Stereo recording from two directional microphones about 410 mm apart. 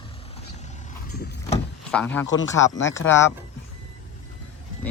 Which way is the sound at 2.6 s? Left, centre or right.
Left.